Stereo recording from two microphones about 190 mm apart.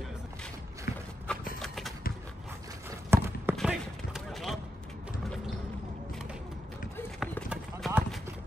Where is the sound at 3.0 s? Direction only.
15° right (ahead or behind).